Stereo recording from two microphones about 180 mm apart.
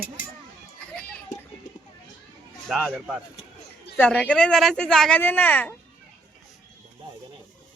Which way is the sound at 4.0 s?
5° left (ahead or behind).